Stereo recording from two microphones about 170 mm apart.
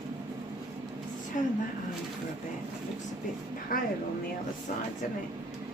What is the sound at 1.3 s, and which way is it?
Speech, 50° left (ahead or behind).